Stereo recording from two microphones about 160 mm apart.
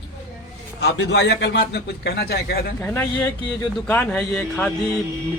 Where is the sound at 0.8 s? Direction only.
90° left.